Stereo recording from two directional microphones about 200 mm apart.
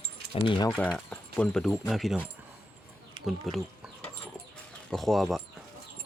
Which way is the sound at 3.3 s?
Centre (ahead or behind).